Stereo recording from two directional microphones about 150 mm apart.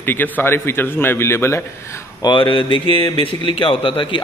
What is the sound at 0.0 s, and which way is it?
A man's voice, 15° left (ahead or behind).